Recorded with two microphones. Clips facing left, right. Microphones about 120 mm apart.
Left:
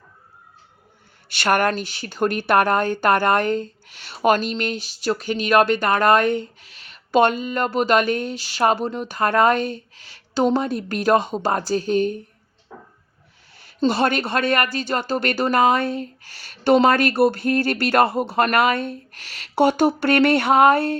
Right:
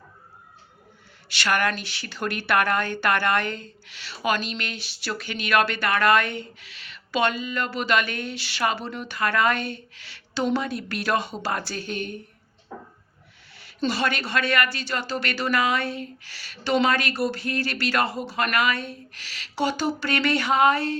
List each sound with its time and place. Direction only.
1.4 s a woman's voice: 50° left (ahead or behind)
13.9 s speech: 45° left (ahead or behind)